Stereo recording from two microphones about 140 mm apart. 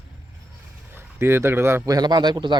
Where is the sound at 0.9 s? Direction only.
15° right (ahead or behind); by 2.5 s 30° right (ahead or behind).